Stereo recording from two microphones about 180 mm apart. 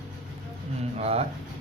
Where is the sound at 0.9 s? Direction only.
35° right (ahead or behind).